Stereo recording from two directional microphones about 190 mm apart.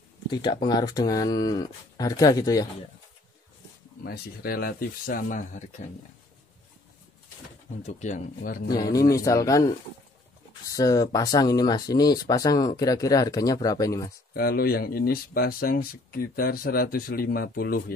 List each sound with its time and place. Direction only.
0.3 s speech: 25° left (ahead or behind)
4.0 s speech: 55° left (ahead or behind)
7.8 s speech: 40° left (ahead or behind)
9.1 s speech: 15° left (ahead or behind)
14.3 s speech: 55° left (ahead or behind)